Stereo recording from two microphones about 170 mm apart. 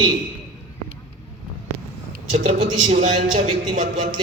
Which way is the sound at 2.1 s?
45° right (ahead or behind).